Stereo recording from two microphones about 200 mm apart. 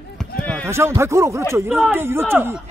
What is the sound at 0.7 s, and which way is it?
Speech, 15° right (ahead or behind).